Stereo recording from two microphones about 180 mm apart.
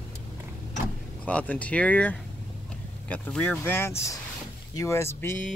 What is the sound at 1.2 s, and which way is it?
Speech, 10° left (ahead or behind).